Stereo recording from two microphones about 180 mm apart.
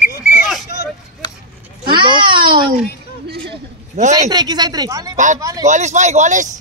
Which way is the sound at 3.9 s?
40° right (ahead or behind).